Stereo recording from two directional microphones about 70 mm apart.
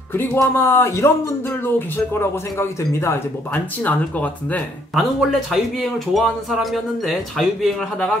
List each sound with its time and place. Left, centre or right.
0.1 s speech: left
3.5 s speech: left
4.9 s speech: centre